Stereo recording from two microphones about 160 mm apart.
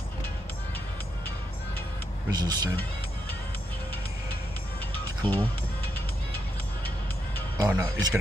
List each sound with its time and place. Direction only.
2.3 s speech: 25° right (ahead or behind)
5.2 s speech: 10° left (ahead or behind)
7.5 s speech: 20° right (ahead or behind)